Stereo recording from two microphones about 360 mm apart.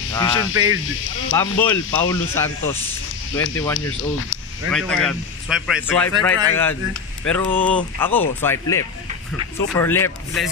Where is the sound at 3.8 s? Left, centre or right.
Left.